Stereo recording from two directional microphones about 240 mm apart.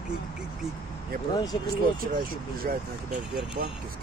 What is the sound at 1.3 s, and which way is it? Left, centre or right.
Speech, centre.